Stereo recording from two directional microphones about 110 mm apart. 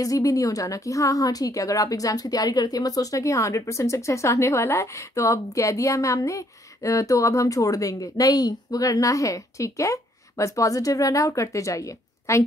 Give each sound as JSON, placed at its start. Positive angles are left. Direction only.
{"t": 0.0, "sound": "a woman's voice", "side_deg": 30}